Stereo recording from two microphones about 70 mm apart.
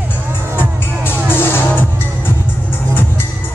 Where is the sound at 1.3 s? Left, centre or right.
Left.